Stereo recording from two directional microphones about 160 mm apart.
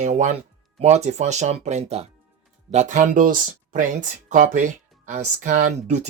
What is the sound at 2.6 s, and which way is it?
Speech, 50° right (ahead or behind).